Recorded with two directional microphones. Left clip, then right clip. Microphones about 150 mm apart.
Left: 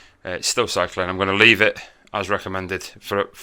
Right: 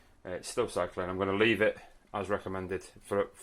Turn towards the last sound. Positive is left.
turn(degrees=20)  # may be behind; listen again after turning